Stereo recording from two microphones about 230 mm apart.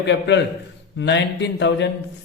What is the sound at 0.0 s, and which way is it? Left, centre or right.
A man's voice, left.